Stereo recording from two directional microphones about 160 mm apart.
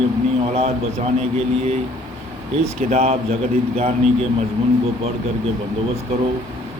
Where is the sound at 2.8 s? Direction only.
45° right (ahead or behind).